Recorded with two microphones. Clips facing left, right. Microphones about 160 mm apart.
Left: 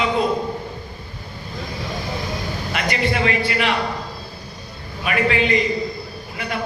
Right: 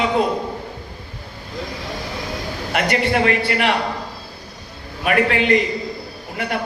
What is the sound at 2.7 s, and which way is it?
A man's voice, 55° right (ahead or behind).